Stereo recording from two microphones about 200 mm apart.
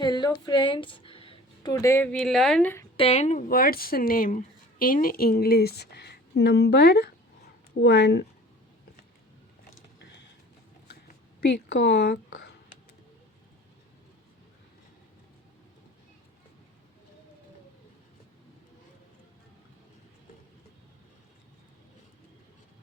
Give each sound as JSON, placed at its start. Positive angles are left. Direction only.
{"t": 0.0, "sound": "speech", "side_deg": 20}
{"t": 3.0, "sound": "speech", "side_deg": 30}
{"t": 10.0, "sound": "a sound", "side_deg": 60}